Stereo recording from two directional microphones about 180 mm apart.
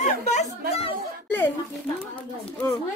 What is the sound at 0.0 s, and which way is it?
Chatter, 40° left (ahead or behind).